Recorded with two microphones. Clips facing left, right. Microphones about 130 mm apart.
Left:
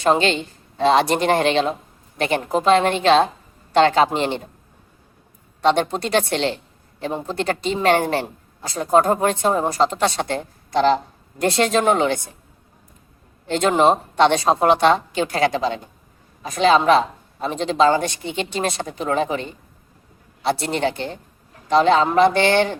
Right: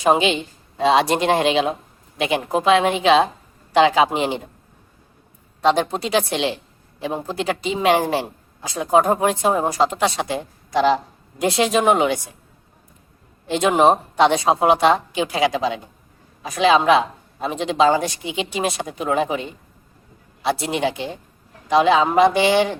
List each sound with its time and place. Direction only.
0.0 s speech: 5° right (ahead or behind)
5.6 s speech: 5° right (ahead or behind)
11.7 s speech: 15° right (ahead or behind)
13.5 s speech: 10° right (ahead or behind)